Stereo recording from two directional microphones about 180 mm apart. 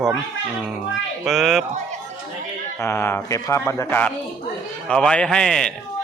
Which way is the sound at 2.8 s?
15° left (ahead or behind).